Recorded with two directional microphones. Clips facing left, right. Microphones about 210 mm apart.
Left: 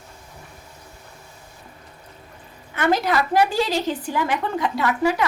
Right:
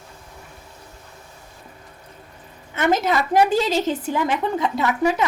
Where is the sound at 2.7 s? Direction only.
20° right (ahead or behind).